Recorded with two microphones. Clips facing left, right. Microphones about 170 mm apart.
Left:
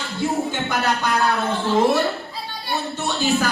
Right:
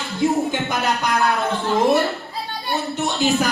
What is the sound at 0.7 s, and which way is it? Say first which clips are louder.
Music: even; 20° right (ahead or behind).